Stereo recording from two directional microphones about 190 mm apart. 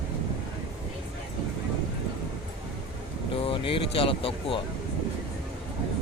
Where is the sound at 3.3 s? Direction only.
30° left (ahead or behind).